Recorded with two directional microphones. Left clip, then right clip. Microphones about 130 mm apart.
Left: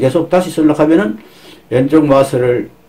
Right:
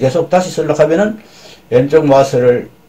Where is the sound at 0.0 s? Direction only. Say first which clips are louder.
Even; 30° left (ahead or behind).